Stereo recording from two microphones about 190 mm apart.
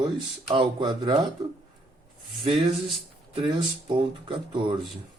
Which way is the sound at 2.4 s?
30° right (ahead or behind).